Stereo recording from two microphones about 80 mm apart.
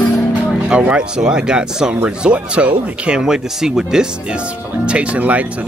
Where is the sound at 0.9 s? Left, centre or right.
Centre.